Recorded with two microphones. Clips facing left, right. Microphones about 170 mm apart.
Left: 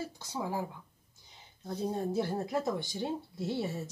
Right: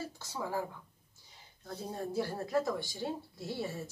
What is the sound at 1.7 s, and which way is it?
Speech, 20° left (ahead or behind).